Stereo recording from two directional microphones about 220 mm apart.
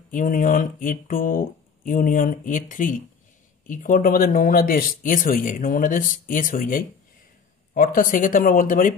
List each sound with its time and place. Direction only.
0.1 s speech: 35° left (ahead or behind)